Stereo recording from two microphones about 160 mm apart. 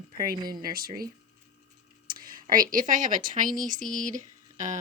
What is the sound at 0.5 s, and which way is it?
Speech, 65° right (ahead or behind).